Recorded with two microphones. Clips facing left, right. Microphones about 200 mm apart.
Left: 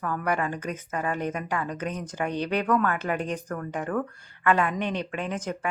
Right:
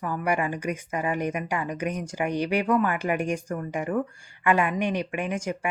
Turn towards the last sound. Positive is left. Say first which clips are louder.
# right 2 dB
turn(degrees=-10)  # may be behind; listen again after turning